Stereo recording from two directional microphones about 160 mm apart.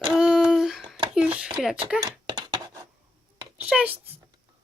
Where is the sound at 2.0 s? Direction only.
30° right (ahead or behind).